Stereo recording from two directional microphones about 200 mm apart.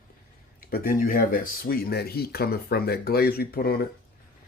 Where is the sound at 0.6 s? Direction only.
45° left (ahead or behind).